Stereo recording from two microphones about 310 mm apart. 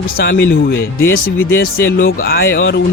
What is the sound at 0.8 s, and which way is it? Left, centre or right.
Speech, left.